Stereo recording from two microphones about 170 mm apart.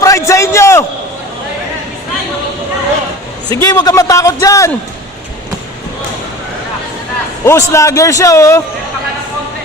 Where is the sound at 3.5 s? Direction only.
20° left (ahead or behind).